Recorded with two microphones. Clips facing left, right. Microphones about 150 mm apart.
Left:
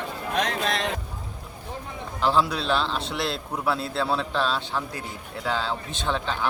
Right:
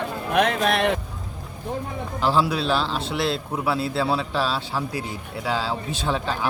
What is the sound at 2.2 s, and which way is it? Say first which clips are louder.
A man's voice: right 1 dB; centre (ahead or behind).